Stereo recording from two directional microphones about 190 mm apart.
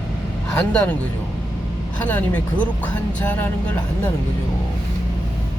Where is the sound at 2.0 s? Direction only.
10° left (ahead or behind).